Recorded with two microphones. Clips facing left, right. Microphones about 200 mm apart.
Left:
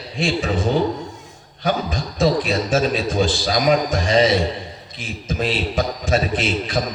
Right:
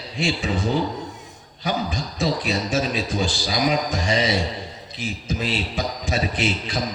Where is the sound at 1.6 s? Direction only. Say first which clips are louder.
Left 3 dB; 55° left (ahead or behind).